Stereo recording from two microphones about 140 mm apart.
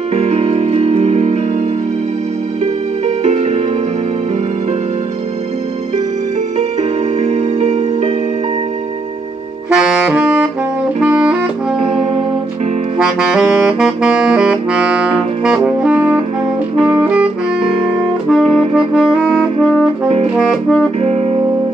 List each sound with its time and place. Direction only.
0.1 s music: 45° right (ahead or behind)
3.3 s music: 45° right (ahead or behind)
6.8 s music: 50° right (ahead or behind)
9.7 s saxophone: 5° right (ahead or behind)
11.8 s saxophone: 40° right (ahead or behind)
12.9 s saxophone: 5° right (ahead or behind)
18.3 s music: 5° right (ahead or behind)
20.3 s saxophone: centre (ahead or behind)
21.0 s music: 45° right (ahead or behind)